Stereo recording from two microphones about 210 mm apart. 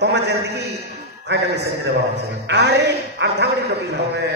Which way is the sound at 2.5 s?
55° right (ahead or behind).